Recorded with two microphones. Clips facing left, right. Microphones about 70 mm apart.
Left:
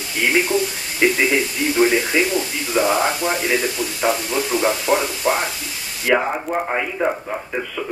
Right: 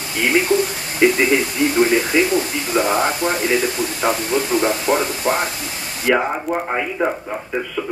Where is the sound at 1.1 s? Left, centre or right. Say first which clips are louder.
Right 2 dB; right.